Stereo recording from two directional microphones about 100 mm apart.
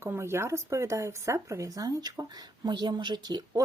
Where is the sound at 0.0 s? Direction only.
25° right (ahead or behind).